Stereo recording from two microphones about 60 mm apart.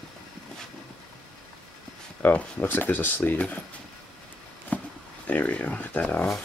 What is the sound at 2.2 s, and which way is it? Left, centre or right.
Speech, left.